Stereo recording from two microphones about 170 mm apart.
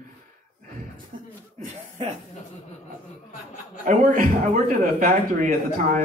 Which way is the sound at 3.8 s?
50° right (ahead or behind).